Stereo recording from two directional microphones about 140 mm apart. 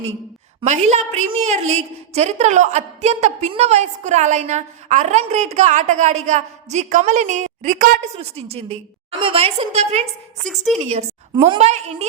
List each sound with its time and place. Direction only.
0.6 s a woman's voice: 55° right (ahead or behind)
8.2 s a woman's voice: 45° right (ahead or behind)
10.4 s a woman's voice: centre (ahead or behind)
10.8 s a woman's voice: 55° right (ahead or behind)